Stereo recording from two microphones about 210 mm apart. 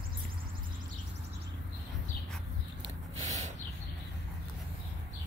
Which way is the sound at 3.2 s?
35° right (ahead or behind).